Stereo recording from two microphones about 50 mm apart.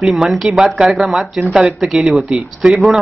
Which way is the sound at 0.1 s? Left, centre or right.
Centre.